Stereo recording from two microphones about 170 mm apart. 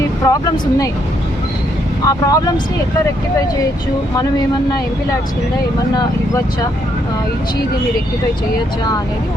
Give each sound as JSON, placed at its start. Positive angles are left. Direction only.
{"t": 0.3, "sound": "speech", "side_deg": 20}
{"t": 2.0, "sound": "speech", "side_deg": 20}
{"t": 4.1, "sound": "speech", "side_deg": 20}